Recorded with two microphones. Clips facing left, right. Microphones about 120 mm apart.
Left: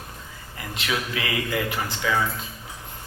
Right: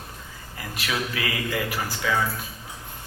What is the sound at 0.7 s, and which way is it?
Speech, 25° left (ahead or behind).